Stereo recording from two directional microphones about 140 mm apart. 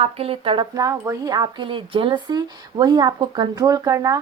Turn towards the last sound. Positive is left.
turn(degrees=-25)  # may be behind; listen again after turning